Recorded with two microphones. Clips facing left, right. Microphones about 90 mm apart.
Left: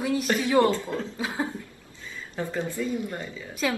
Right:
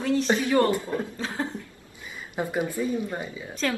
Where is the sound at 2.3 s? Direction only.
15° right (ahead or behind).